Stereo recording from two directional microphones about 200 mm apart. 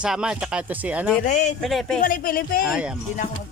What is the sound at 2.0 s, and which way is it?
Speech, 45° left (ahead or behind).